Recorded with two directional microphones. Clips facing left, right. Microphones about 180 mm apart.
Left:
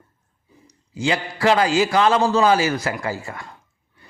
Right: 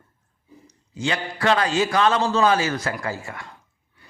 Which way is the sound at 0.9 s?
30° left (ahead or behind).